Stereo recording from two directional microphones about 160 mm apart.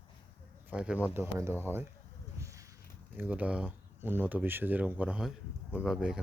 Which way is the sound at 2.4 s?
20° right (ahead or behind).